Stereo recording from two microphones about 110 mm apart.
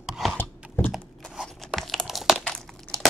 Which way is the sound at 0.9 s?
Centre (ahead or behind).